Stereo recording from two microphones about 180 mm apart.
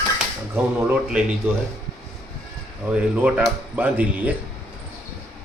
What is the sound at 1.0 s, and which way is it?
Speech, 5° right (ahead or behind).